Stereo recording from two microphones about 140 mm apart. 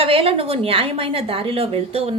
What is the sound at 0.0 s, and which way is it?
A woman's voice, 40° right (ahead or behind).